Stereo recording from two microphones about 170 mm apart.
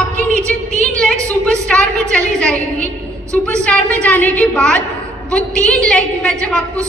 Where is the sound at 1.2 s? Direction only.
5° left (ahead or behind).